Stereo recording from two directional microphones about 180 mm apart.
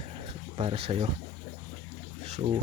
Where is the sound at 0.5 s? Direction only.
35° right (ahead or behind).